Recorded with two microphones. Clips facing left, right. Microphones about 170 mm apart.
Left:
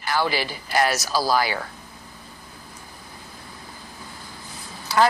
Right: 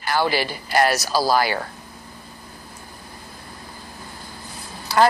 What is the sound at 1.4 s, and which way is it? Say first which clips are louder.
Speech: right 3 dB; 45° right (ahead or behind).